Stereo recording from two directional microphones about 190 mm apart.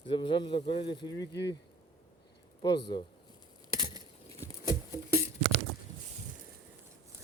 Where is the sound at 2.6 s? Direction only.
25° left (ahead or behind).